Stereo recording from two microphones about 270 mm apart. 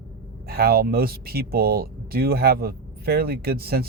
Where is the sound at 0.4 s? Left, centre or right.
Right.